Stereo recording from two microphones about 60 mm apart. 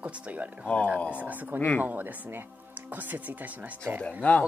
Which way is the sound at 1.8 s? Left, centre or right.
Right.